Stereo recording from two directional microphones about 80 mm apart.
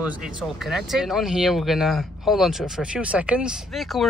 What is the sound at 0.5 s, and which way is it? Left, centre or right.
Speech, centre.